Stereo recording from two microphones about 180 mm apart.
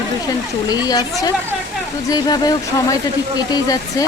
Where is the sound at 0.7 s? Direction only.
20° left (ahead or behind).